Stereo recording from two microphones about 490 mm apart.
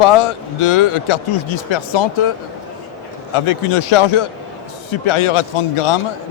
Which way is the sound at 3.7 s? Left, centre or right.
Left.